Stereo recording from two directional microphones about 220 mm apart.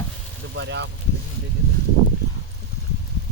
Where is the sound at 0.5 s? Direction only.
55° right (ahead or behind).